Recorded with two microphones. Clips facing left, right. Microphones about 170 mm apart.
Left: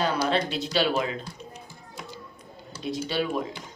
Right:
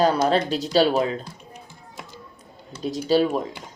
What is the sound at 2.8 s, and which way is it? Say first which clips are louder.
Speech: right 8 dB; 40° right (ahead or behind).